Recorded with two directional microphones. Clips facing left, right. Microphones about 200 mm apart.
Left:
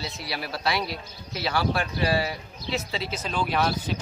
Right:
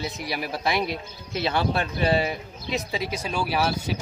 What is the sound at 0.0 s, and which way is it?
A man's voice, 15° right (ahead or behind).